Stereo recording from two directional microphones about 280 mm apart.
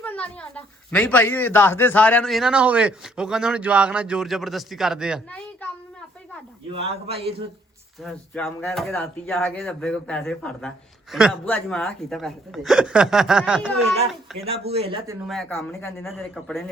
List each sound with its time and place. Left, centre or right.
0.0 s speech: centre
6.7 s speech: right
8.0 s speech: centre
14.3 s speech: right
15.3 s speech: centre